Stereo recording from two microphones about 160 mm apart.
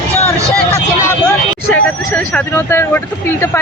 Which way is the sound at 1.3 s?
5° left (ahead or behind).